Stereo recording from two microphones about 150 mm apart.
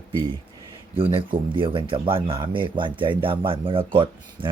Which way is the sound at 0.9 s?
40° right (ahead or behind).